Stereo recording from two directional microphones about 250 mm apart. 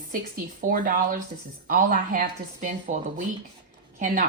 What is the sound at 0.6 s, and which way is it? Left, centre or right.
A woman's voice, right.